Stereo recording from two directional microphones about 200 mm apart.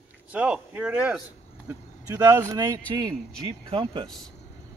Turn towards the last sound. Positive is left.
turn(degrees=-25)  # may be behind; listen again after turning